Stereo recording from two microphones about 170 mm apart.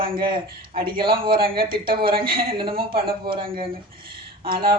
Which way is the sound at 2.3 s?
60° right (ahead or behind).